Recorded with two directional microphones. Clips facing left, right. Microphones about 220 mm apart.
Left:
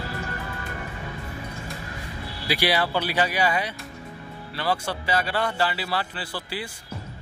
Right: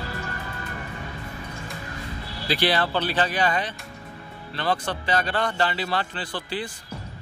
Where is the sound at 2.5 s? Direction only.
10° left (ahead or behind).